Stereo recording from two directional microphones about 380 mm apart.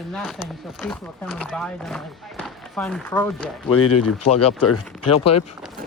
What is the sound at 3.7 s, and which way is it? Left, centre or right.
Speech, left.